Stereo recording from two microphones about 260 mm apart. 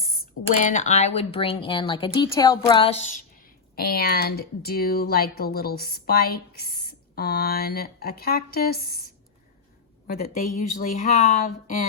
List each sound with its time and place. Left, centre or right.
0.6 s speech: left
10.2 s speech: left